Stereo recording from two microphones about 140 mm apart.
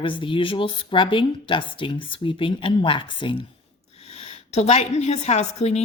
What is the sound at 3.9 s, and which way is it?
A woman's voice, 50° left (ahead or behind).